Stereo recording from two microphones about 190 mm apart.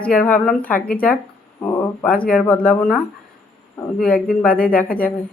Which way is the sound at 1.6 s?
5° left (ahead or behind).